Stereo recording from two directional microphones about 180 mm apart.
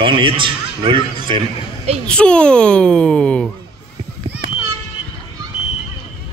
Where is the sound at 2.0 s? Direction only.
5° left (ahead or behind).